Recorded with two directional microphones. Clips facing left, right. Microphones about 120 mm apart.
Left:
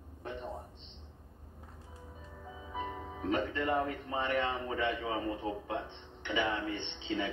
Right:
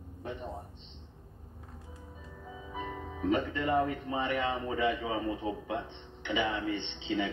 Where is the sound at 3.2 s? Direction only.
10° right (ahead or behind).